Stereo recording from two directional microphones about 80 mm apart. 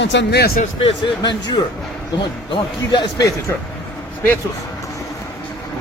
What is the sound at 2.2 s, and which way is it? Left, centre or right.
A man's voice, left.